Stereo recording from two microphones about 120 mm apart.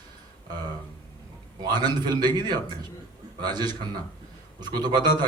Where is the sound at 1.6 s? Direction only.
35° right (ahead or behind).